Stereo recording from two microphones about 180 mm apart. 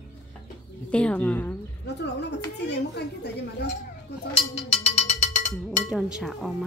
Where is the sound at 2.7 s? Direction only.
70° left (ahead or behind).